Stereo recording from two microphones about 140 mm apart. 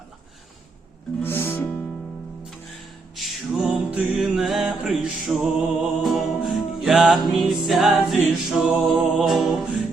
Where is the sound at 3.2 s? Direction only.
Centre (ahead or behind).